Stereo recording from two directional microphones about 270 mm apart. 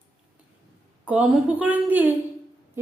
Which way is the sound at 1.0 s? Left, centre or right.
Centre.